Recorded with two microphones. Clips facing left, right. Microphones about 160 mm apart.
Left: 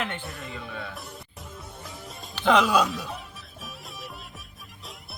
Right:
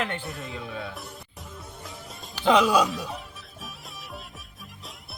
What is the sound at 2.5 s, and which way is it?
Speech, 10° right (ahead or behind).